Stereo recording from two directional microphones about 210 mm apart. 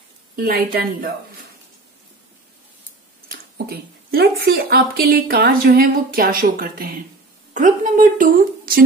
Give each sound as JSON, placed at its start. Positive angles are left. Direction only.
{"t": 0.4, "sound": "a woman's voice", "side_deg": -45}
{"t": 3.3, "sound": "a woman's voice", "side_deg": -45}